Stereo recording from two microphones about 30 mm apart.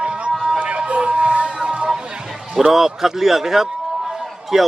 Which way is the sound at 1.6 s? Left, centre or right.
Right.